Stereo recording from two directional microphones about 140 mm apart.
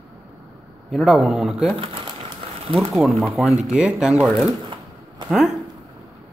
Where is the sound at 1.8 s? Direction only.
40° right (ahead or behind).